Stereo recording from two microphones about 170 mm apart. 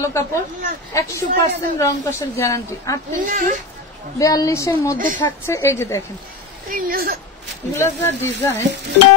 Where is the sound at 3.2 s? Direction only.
55° right (ahead or behind).